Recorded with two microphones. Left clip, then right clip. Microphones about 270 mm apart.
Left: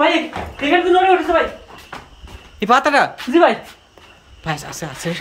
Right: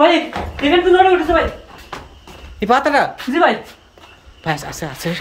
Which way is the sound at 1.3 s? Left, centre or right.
Centre.